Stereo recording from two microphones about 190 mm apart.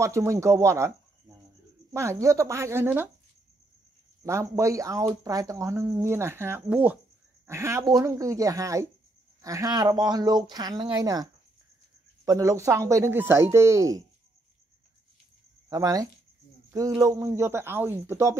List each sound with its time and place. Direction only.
0.0 s speech: 15° right (ahead or behind)
2.0 s speech: 15° right (ahead or behind)
4.2 s speech: 15° right (ahead or behind)
12.3 s speech: 15° right (ahead or behind)
15.7 s speech: 20° right (ahead or behind)